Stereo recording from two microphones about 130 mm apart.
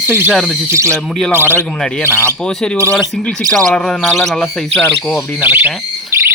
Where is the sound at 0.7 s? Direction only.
20° right (ahead or behind).